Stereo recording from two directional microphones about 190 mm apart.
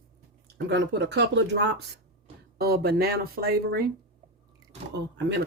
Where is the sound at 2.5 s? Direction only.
55° right (ahead or behind).